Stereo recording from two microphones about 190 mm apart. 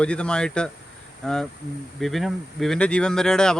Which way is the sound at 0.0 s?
5° left (ahead or behind).